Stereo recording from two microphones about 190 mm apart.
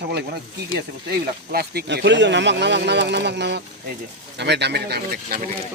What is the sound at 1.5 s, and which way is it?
Speech, 55° right (ahead or behind).